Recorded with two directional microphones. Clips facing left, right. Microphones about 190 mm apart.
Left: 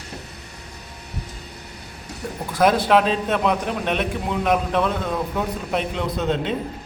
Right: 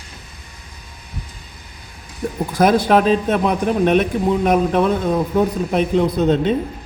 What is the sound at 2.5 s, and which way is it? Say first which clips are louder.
A man's voice: right 3 dB; 45° right (ahead or behind).